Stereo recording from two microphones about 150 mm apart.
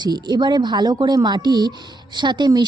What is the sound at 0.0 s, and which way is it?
Speech, 30° right (ahead or behind).